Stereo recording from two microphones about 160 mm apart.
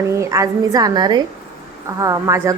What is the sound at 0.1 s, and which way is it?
A woman's voice, 20° right (ahead or behind).